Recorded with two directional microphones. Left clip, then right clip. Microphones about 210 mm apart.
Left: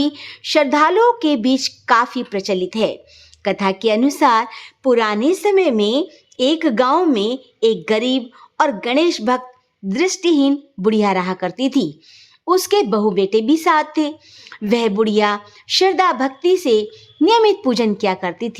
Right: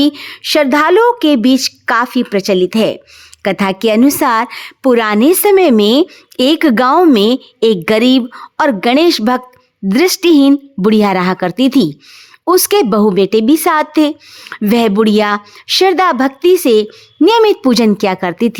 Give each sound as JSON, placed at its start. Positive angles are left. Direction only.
{"t": 0.0, "sound": "a woman's voice", "side_deg": -35}